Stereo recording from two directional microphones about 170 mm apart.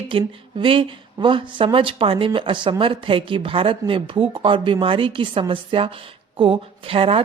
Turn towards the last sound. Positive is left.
turn(degrees=-30)  # may be behind; listen again after turning